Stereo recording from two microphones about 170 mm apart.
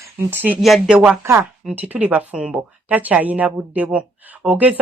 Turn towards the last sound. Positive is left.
turn(degrees=-10)  # may be behind; listen again after turning